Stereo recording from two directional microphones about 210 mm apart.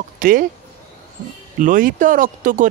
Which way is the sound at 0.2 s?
40° right (ahead or behind).